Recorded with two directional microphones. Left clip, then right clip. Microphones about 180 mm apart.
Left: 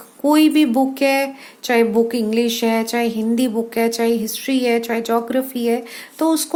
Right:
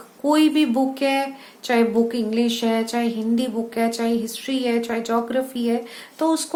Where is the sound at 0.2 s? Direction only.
40° left (ahead or behind).